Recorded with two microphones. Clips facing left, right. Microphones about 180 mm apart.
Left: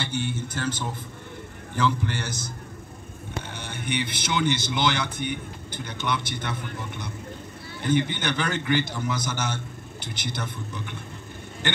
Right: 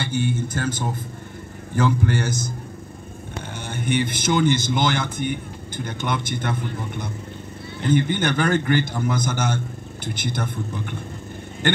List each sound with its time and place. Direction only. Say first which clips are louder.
0.0 s speech: right 5 dB; 50° right (ahead or behind)
3.5 s speech: right 7 dB; 50° right (ahead or behind)
7.9 s speech: right 4 dB; 50° right (ahead or behind)